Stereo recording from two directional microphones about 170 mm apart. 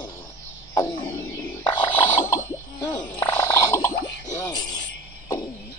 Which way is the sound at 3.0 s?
15° left (ahead or behind).